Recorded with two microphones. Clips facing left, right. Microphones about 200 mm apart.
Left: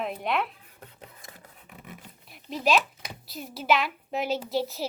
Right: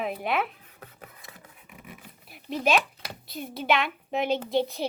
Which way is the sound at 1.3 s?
40° left (ahead or behind).